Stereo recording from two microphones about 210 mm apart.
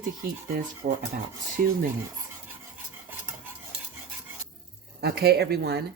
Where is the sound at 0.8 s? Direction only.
35° right (ahead or behind).